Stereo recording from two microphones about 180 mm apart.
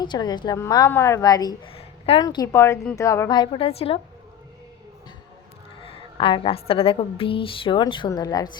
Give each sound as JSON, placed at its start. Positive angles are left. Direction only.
{"t": 0.0, "sound": "a woman's voice", "side_deg": 25}
{"t": 2.2, "sound": "a woman's voice", "side_deg": 20}
{"t": 5.8, "sound": "a woman's voice", "side_deg": 30}